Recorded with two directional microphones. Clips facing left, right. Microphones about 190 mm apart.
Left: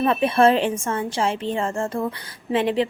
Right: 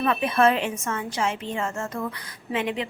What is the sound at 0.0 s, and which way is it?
A woman's voice, 30° left (ahead or behind).